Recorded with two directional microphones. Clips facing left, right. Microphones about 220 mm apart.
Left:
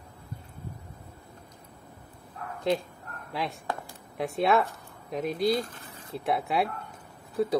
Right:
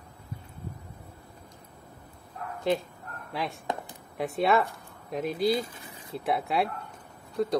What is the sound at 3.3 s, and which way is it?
Speech, centre (ahead or behind).